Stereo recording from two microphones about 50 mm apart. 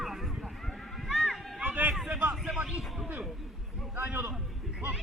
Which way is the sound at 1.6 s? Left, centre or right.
Right.